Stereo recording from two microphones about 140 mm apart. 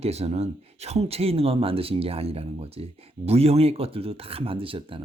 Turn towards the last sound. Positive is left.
turn(degrees=-40)  # may be behind; listen again after turning